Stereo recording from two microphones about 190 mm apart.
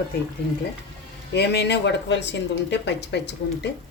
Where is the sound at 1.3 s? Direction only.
60° left (ahead or behind).